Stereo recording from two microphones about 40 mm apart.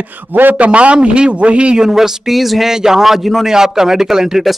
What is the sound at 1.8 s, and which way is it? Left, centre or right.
Speech, centre.